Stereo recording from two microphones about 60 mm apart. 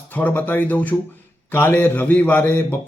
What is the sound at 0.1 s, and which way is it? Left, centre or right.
A man's voice, left.